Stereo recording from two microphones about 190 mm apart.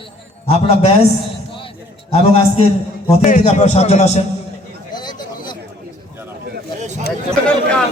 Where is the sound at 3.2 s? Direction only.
40° left (ahead or behind).